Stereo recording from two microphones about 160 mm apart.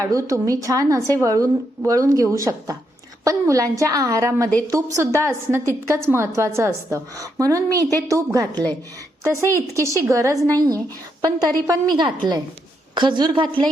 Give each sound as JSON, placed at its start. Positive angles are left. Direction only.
{"t": 0.0, "sound": "a woman's voice", "side_deg": -20}